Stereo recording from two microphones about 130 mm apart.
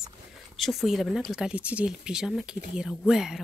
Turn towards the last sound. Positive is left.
turn(degrees=-5)  # may be behind; listen again after turning